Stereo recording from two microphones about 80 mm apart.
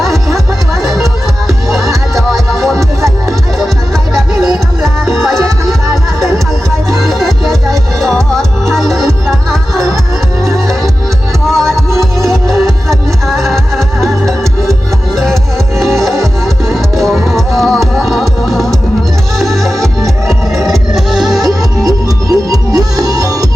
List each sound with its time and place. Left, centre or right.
0.0 s music: centre
4.1 s music: centre
7.0 s music: centre
11.5 s music: centre
21.4 s music: right